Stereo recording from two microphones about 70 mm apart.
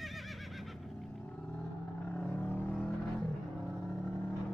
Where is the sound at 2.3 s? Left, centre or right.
Left.